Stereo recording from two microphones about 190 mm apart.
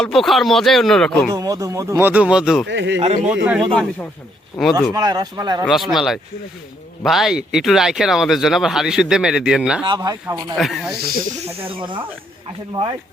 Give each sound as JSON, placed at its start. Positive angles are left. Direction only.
{"t": 0.0, "sound": "speech", "side_deg": 0}
{"t": 1.3, "sound": "speech", "side_deg": -20}
{"t": 2.6, "sound": "speech", "side_deg": -75}
{"t": 3.0, "sound": "speech", "side_deg": -35}
{"t": 3.7, "sound": "speech", "side_deg": 5}
{"t": 4.9, "sound": "speech", "side_deg": -20}
{"t": 5.6, "sound": "speech", "side_deg": 0}
{"t": 9.8, "sound": "speech", "side_deg": -20}
{"t": 10.6, "sound": "speech", "side_deg": 0}
{"t": 11.3, "sound": "speech", "side_deg": -30}